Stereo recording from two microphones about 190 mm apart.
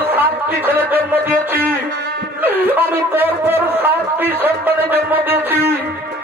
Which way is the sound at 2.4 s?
10° right (ahead or behind).